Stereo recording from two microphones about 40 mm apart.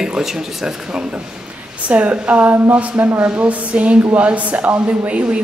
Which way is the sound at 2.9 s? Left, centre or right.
Right.